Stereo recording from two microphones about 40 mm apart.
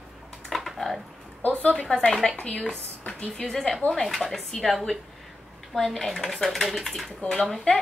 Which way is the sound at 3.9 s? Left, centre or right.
Centre.